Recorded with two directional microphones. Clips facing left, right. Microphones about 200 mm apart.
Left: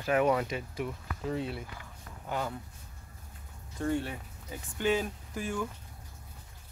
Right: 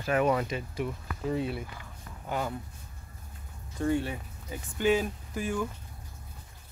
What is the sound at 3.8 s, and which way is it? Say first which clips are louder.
Speech: right 3 dB; 5° right (ahead or behind).